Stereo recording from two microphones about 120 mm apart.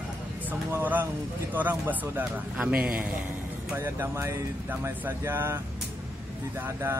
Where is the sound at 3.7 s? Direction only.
20° right (ahead or behind).